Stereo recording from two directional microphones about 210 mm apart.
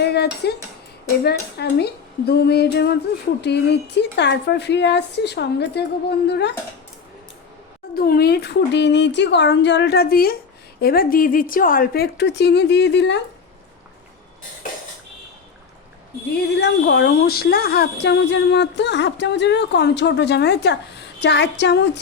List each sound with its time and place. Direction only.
0.0 s a woman's voice: 50° left (ahead or behind)
7.9 s a woman's voice: 45° left (ahead or behind)
16.6 s a woman's voice: 55° left (ahead or behind)